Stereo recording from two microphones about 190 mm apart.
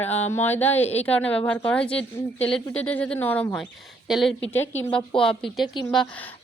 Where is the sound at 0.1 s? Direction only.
35° left (ahead or behind).